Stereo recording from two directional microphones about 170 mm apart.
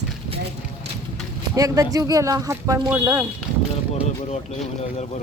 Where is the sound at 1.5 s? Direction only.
20° right (ahead or behind).